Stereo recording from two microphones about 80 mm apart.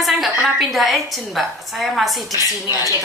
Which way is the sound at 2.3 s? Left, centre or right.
Left.